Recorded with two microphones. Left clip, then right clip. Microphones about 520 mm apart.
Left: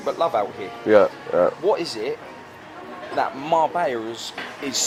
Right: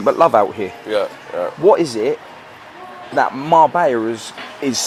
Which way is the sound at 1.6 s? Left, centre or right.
Right.